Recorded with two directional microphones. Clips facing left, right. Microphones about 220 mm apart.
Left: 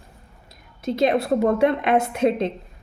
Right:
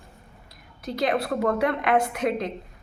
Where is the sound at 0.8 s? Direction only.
25° left (ahead or behind).